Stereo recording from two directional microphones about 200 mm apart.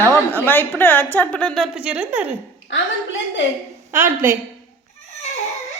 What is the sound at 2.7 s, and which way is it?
Speech, 65° left (ahead or behind).